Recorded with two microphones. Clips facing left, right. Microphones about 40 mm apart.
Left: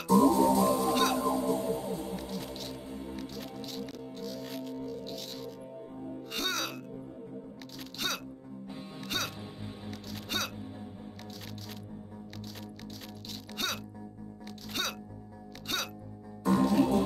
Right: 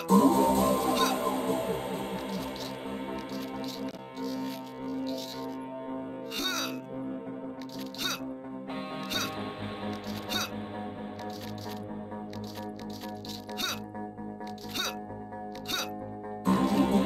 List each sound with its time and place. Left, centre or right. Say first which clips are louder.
0.1 s music: right 1 dB; right
6.3 s music: even; centre
9.8 s music: right 3 dB; centre
16.4 s music: even; right